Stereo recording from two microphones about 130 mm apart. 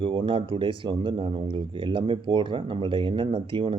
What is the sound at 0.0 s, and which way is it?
Speech, 40° right (ahead or behind).